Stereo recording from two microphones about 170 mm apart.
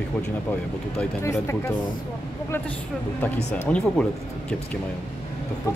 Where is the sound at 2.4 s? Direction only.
10° left (ahead or behind).